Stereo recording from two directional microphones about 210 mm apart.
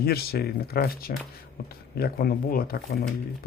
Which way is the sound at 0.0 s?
50° left (ahead or behind).